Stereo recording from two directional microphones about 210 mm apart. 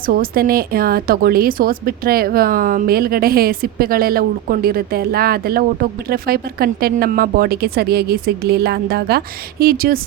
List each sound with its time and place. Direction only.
0.1 s speech: 45° right (ahead or behind)